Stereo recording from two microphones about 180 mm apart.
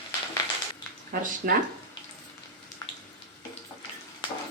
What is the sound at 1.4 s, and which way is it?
Speech, 50° right (ahead or behind).